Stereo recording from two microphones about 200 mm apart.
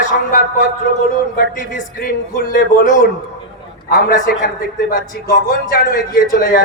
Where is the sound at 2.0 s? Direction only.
45° left (ahead or behind).